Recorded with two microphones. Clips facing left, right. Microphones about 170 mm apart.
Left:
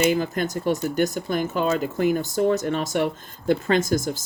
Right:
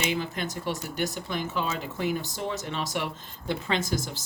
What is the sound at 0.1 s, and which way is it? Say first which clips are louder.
Speech: left 7 dB; 45° left (ahead or behind).